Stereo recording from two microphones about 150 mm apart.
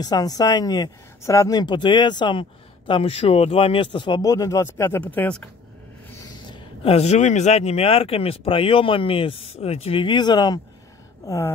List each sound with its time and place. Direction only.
0.0 s speech: 25° left (ahead or behind)
6.5 s speech: 40° left (ahead or behind); by 11.5 s 20° left (ahead or behind)